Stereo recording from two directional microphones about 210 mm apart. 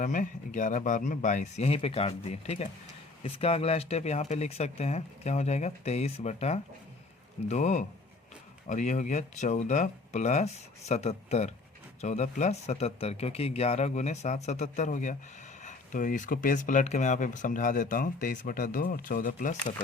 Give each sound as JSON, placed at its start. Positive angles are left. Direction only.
{"t": 0.0, "sound": "speech", "side_deg": 35}